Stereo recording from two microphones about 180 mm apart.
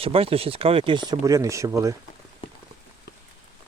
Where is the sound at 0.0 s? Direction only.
30° right (ahead or behind).